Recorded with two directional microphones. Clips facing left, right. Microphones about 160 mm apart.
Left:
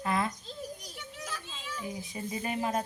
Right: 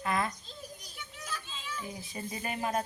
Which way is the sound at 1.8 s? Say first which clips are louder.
Left 6 dB; 15° left (ahead or behind).